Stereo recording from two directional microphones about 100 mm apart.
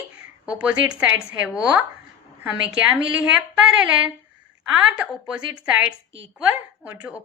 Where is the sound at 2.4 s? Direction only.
15° right (ahead or behind).